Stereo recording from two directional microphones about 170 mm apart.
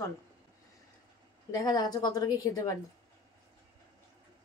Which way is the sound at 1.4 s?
20° left (ahead or behind).